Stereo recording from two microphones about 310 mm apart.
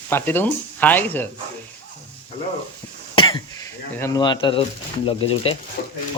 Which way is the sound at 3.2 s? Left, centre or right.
Centre.